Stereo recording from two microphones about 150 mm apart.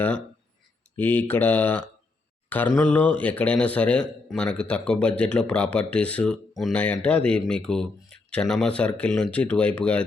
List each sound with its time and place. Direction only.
0.9 s speech: 10° left (ahead or behind)